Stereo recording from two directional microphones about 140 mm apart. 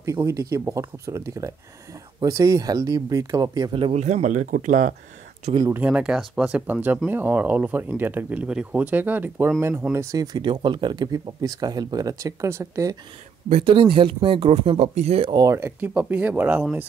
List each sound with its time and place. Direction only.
0.0 s speech: 25° right (ahead or behind)
3.7 s speech: 45° right (ahead or behind); by 4.9 s 65° right (ahead or behind)
5.7 s speech: 10° right (ahead or behind)
9.9 s speech: 25° right (ahead or behind)
13.5 s speech: 45° right (ahead or behind)
15.3 s speech: 20° right (ahead or behind)